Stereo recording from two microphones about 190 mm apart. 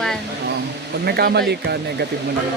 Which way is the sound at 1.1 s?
55° right (ahead or behind).